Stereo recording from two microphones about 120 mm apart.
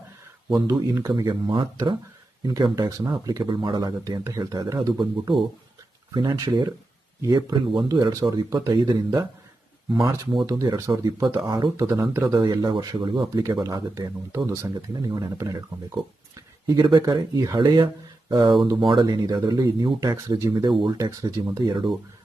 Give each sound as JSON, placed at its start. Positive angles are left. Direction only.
{"t": 0.5, "sound": "speech", "side_deg": -30}
{"t": 6.3, "sound": "speech", "side_deg": -30}
{"t": 10.4, "sound": "speech", "side_deg": -30}
{"t": 11.9, "sound": "speech", "side_deg": -25}
{"t": 12.3, "sound": "speech", "side_deg": -40}
{"t": 16.6, "sound": "speech", "side_deg": -35}